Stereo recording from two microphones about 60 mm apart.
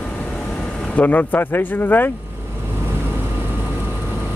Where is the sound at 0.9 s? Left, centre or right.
Left.